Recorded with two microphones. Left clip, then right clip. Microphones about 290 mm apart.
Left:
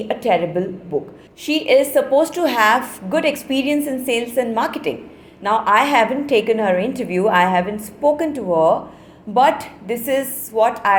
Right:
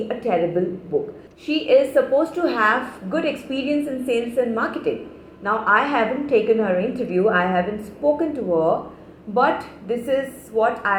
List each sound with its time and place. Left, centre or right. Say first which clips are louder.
0.1 s a woman's voice: left 4 dB; left